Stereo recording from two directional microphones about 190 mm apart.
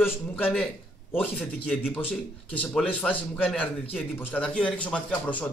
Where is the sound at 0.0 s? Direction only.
5° left (ahead or behind).